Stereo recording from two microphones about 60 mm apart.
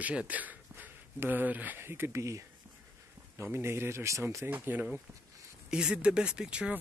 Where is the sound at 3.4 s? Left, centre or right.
Right.